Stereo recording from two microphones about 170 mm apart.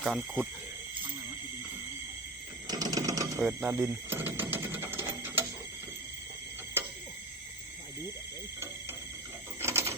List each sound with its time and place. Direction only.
0.0 s speech: 5° right (ahead or behind)
2.6 s sewing machine: 20° right (ahead or behind)
3.4 s speech: 10° right (ahead or behind)
4.4 s mechanisms: 10° right (ahead or behind)
9.6 s a sound: 15° right (ahead or behind)